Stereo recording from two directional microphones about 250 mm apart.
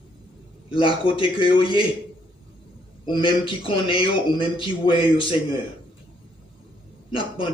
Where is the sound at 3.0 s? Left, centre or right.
Centre.